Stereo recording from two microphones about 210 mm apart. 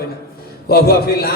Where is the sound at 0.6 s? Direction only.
45° left (ahead or behind).